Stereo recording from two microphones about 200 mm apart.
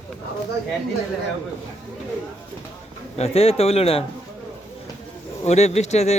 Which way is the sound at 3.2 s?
30° left (ahead or behind).